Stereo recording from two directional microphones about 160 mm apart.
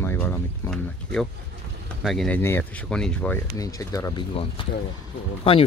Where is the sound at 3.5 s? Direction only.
20° left (ahead or behind).